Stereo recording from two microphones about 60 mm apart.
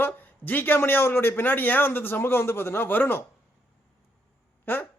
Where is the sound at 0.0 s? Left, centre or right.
Left.